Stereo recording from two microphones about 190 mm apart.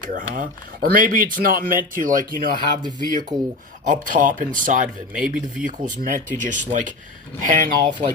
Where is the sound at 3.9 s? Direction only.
40° right (ahead or behind).